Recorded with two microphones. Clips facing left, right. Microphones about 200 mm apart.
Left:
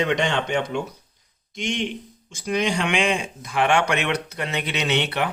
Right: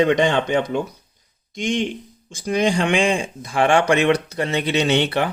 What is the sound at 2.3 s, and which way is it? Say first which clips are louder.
Speech: right 4 dB; 35° right (ahead or behind).